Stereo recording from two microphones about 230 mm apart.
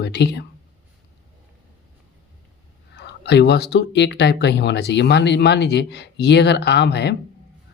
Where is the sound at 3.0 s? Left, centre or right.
Left.